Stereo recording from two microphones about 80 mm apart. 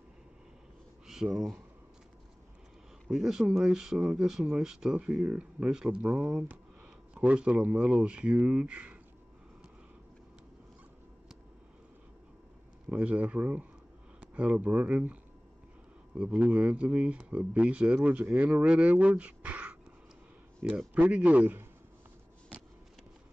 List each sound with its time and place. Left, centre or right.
1.0 s speech: centre
3.1 s speech: centre
12.9 s speech: centre
16.2 s speech: centre
18.5 s speech: centre